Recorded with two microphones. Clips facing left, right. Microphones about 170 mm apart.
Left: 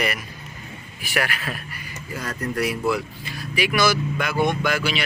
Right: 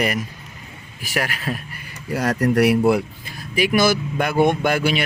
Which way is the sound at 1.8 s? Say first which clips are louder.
Right 9 dB; 70° right (ahead or behind).